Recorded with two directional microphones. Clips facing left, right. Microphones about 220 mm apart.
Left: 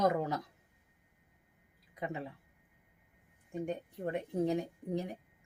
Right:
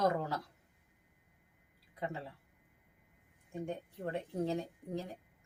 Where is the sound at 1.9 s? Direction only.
20° left (ahead or behind).